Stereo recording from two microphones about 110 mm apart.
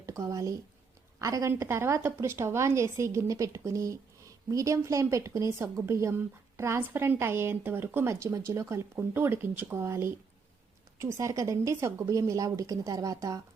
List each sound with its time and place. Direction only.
0.0 s a woman's voice: 30° right (ahead or behind)